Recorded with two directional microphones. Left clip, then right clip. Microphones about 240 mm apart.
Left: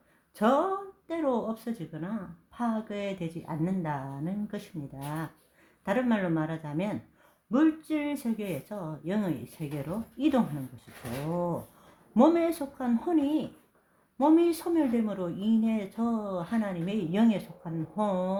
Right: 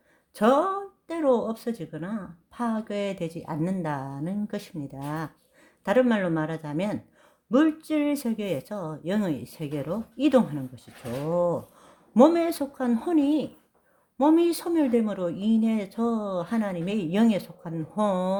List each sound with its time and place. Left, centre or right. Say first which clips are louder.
0.3 s speech: right 4 dB; right